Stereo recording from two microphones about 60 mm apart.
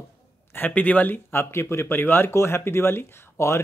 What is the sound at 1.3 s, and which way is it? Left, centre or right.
Speech, left.